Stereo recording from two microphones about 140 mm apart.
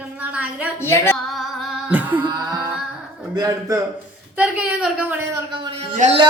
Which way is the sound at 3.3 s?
25° right (ahead or behind).